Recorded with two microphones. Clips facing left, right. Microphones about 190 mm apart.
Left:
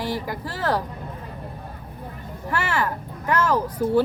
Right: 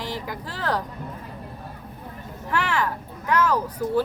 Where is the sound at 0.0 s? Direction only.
10° left (ahead or behind).